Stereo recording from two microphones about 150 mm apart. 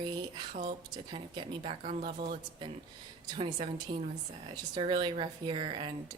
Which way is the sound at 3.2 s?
35° right (ahead or behind).